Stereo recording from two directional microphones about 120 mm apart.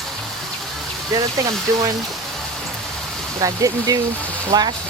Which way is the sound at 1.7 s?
25° right (ahead or behind).